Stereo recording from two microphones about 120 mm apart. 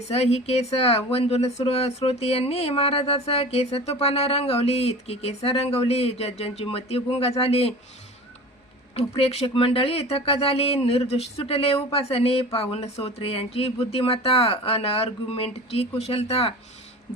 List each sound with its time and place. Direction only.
0.1 s speech: 60° left (ahead or behind)
9.0 s speech: 55° left (ahead or behind)